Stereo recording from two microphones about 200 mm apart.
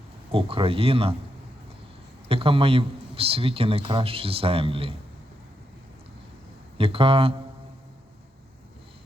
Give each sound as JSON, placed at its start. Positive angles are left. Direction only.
{"t": 0.3, "sound": "speech", "side_deg": -30}
{"t": 2.3, "sound": "speech", "side_deg": -25}
{"t": 6.7, "sound": "speech", "side_deg": -30}